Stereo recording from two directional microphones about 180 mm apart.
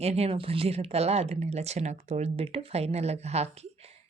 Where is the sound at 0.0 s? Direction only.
35° right (ahead or behind).